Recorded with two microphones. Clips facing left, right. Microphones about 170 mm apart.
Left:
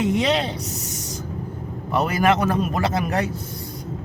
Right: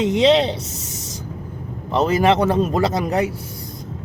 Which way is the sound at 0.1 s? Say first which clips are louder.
Right 6 dB; 20° right (ahead or behind).